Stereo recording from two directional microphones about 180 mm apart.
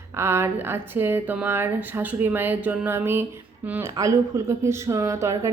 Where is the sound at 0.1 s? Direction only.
15° right (ahead or behind).